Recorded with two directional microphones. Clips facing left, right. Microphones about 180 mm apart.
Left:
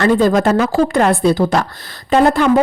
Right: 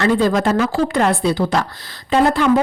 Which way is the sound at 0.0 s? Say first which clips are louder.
Left 3 dB; 45° left (ahead or behind).